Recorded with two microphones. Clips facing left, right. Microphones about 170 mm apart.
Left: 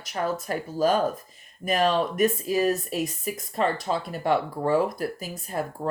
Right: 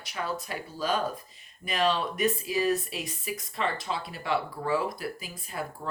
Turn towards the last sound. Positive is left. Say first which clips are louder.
# left 6 dB
turn(degrees=45)  # may be behind; listen again after turning